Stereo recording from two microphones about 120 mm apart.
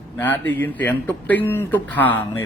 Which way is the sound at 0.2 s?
15° left (ahead or behind).